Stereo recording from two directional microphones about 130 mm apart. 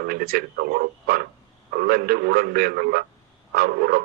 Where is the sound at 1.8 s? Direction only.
90° right.